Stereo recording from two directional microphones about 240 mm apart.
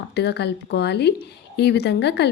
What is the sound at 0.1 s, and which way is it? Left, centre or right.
A woman's voice, left.